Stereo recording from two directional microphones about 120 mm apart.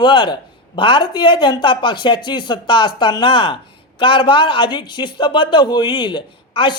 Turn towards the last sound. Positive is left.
turn(degrees=40)  # may be behind; listen again after turning